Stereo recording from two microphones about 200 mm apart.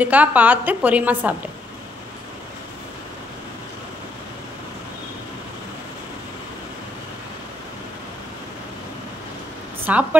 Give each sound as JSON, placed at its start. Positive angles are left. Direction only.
{"t": 0.0, "sound": "a woman's voice", "side_deg": -10}
{"t": 9.9, "sound": "a woman's voice", "side_deg": -5}